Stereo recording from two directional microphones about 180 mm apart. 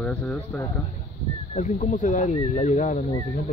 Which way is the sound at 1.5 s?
40° left (ahead or behind).